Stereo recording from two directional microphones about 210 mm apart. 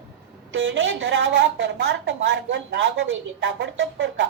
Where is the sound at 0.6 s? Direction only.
60° right (ahead or behind).